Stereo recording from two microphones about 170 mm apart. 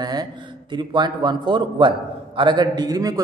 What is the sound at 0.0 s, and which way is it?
A man's voice, 25° right (ahead or behind).